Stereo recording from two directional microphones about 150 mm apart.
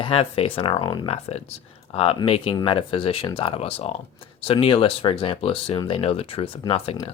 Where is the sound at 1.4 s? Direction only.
45° left (ahead or behind).